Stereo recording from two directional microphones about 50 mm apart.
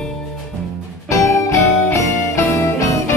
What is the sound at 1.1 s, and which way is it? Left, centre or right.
Music, left.